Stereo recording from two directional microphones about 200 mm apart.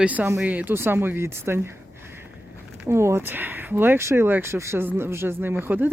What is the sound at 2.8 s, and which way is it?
Speech, 15° right (ahead or behind).